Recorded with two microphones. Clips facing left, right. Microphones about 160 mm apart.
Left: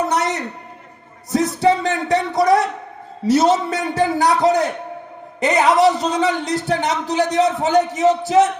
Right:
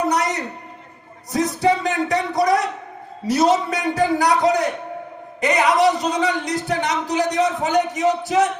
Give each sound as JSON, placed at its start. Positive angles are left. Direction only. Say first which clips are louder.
{"t": 1.3, "sound": "music", "louder": "left 2 dB", "side_deg": 25}
{"t": 3.2, "sound": "a man's voice", "louder": "left 2 dB", "side_deg": 25}